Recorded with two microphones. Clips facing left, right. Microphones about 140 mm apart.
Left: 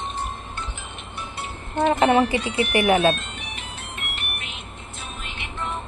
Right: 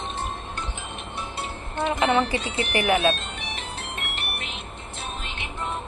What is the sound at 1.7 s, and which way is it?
Speech, 40° left (ahead or behind).